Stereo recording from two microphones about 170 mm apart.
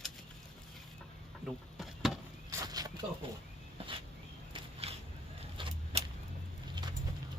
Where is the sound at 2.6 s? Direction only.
20° right (ahead or behind).